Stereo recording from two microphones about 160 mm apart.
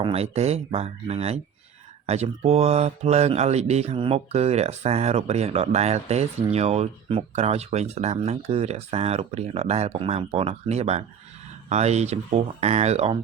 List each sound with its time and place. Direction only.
0.0 s speech: 40° right (ahead or behind)